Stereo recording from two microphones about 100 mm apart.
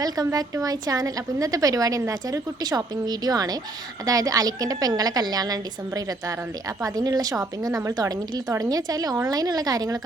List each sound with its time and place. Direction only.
0.0 s a woman's voice: 40° right (ahead or behind)